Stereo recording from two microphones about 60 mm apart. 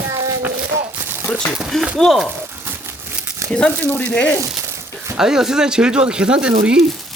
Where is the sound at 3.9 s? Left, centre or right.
Left.